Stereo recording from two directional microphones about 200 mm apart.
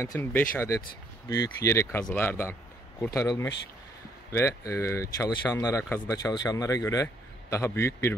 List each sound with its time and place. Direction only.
0.0 s speech: 10° left (ahead or behind)